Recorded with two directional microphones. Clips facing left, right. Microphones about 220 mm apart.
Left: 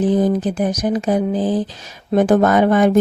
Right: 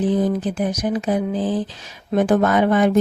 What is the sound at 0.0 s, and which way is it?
Speech, 45° left (ahead or behind).